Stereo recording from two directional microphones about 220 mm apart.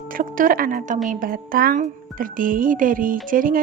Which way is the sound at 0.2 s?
40° right (ahead or behind).